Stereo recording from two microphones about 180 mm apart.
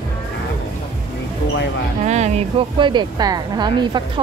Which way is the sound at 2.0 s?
40° right (ahead or behind).